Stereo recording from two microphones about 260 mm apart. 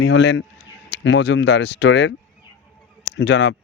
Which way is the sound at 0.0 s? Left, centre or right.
Left.